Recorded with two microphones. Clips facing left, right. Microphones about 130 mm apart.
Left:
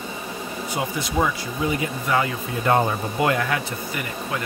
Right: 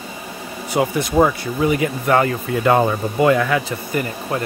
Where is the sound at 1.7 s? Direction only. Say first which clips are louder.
Right 6 dB; 60° right (ahead or behind).